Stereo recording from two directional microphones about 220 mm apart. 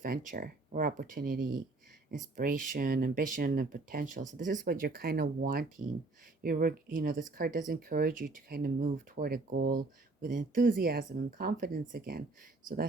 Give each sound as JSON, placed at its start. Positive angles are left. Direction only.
{"t": 0.0, "sound": "speech", "side_deg": -35}